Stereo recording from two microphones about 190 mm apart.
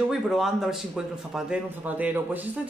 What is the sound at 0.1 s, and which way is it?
A man's voice, centre (ahead or behind).